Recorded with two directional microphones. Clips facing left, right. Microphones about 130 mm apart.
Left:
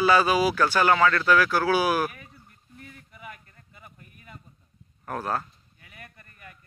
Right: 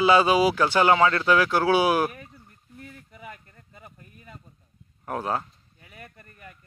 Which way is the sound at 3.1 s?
30° right (ahead or behind).